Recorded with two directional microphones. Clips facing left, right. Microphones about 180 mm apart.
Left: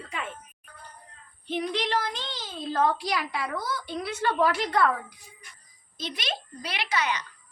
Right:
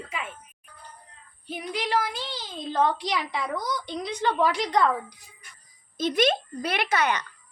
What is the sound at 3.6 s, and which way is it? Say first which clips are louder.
A woman's voice: right 1 dB; 15° right (ahead or behind).